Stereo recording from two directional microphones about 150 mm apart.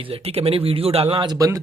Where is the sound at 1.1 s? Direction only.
30° right (ahead or behind).